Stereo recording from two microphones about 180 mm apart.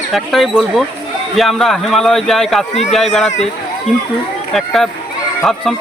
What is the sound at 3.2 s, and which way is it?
Speech, 40° left (ahead or behind).